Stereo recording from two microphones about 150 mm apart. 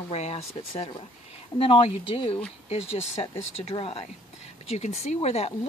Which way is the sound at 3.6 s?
40° left (ahead or behind).